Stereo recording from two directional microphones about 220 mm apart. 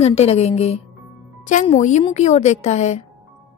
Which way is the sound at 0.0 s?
30° left (ahead or behind).